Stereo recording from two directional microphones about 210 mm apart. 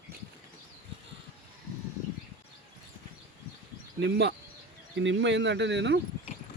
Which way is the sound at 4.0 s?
55° right (ahead or behind).